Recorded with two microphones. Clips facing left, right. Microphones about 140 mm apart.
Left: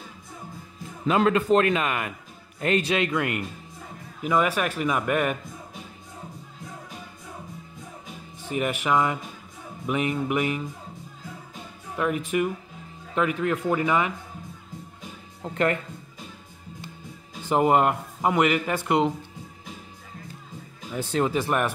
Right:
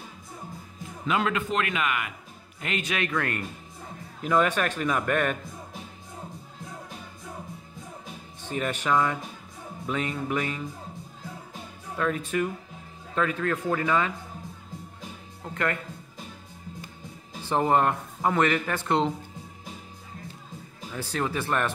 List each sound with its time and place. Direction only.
1.0 s a man's voice: 35° left (ahead or behind); by 5.4 s 10° left (ahead or behind)
8.5 s speech: 10° left (ahead or behind)
12.0 s speech: 15° left (ahead or behind)
15.5 s speech: 25° left (ahead or behind)
17.5 s speech: 15° left (ahead or behind)
20.9 s speech: 20° left (ahead or behind)